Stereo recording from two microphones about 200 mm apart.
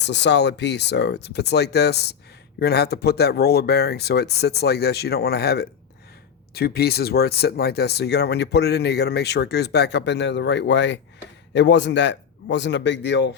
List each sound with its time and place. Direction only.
0.0 s speech: 60° left (ahead or behind)